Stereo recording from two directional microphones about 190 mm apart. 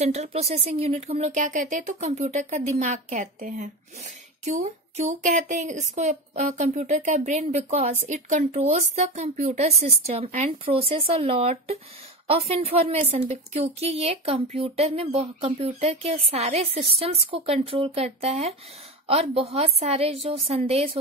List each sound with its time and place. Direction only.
0.0 s speech: 35° right (ahead or behind)